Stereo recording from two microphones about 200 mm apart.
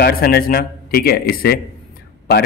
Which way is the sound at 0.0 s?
50° left (ahead or behind).